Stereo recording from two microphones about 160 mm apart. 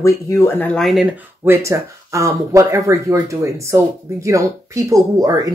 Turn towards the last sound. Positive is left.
turn(degrees=-20)  # may be behind; listen again after turning